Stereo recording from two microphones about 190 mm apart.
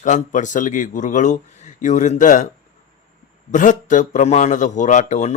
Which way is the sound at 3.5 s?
40° left (ahead or behind).